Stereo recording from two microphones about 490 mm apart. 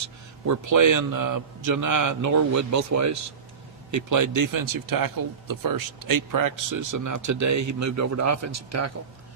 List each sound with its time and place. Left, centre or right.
0.0 s speech: right